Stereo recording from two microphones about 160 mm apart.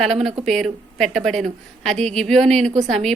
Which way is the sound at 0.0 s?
Centre (ahead or behind).